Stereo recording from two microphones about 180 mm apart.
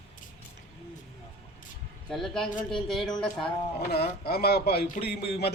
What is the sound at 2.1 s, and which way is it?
Speech, centre (ahead or behind).